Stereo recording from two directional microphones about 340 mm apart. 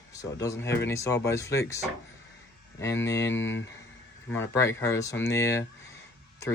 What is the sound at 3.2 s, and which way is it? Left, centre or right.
Speech, left.